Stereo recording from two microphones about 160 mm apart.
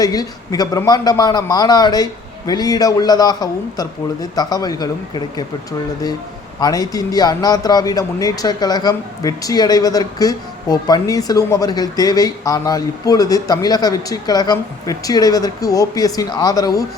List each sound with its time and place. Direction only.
0.0 s a man's voice: 25° left (ahead or behind)
6.6 s a man's voice: 25° left (ahead or behind)